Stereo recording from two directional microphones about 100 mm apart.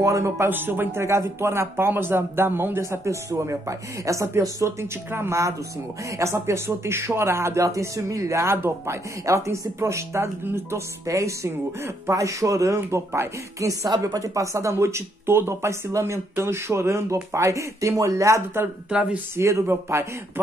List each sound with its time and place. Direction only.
0.0 s speech: 30° right (ahead or behind)
18.9 s speech: 10° right (ahead or behind)
19.3 s speech: 25° right (ahead or behind)